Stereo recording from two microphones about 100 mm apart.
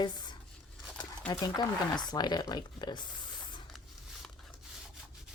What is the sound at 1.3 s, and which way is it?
Speech, 45° left (ahead or behind).